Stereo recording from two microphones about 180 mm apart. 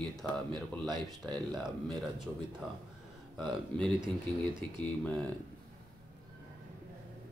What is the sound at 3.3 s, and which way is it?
Speech, 5° left (ahead or behind).